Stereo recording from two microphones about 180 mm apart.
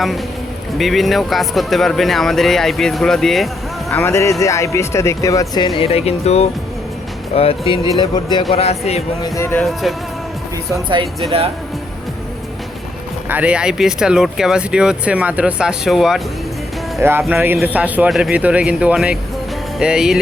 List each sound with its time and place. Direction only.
0.8 s speech: centre (ahead or behind)
3.9 s a man's voice: 15° left (ahead or behind)
8.5 s speech: 35° left (ahead or behind)
9.2 s speech: 15° left (ahead or behind)
9.8 s speech: centre (ahead or behind)
10.8 s speech: 25° right (ahead or behind)
13.2 s speech: 10° right (ahead or behind)
17.0 s a man's voice: 10° right (ahead or behind)